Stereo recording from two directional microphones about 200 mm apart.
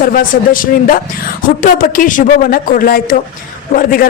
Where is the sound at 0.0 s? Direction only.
45° left (ahead or behind).